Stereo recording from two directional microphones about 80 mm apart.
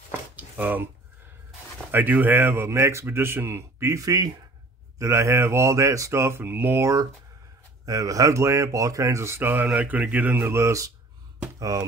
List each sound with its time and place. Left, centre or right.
0.4 s a sound: right
1.9 s speech: right
4.9 s speech: right
6.8 s speech: right; by 10.4 s centre
10.4 s speech: right